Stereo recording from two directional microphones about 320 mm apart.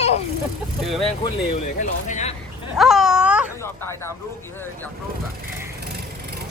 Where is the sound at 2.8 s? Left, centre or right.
Centre.